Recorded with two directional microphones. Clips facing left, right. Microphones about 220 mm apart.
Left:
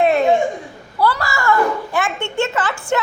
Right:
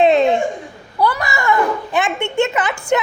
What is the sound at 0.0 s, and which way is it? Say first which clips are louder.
Laughter: right 3 dB; 20° right (ahead or behind).